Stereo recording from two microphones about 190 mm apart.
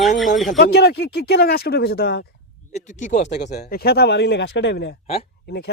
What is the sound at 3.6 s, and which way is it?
Speech, 55° left (ahead or behind).